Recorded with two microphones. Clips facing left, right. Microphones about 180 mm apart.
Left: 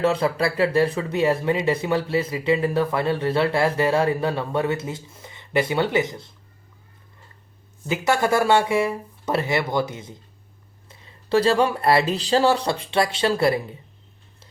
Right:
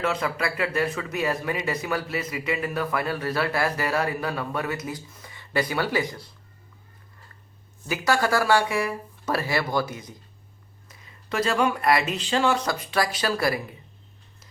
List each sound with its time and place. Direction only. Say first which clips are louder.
0.0 s speech: left 6 dB; 30° left (ahead or behind)
7.9 s speech: left 3 dB; 25° left (ahead or behind)